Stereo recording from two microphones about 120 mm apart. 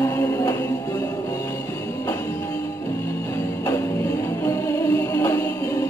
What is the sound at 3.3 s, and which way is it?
Music, 25° left (ahead or behind).